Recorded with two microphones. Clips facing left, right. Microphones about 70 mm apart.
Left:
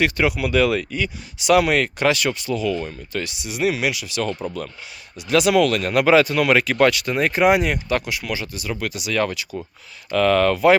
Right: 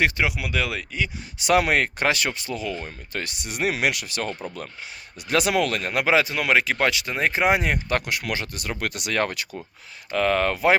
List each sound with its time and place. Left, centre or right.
0.2 s speech: centre
1.4 s speech: right
4.4 s speech: right
10.1 s speech: right